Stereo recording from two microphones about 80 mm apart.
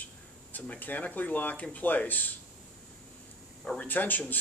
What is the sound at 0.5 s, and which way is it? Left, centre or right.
Speech, left.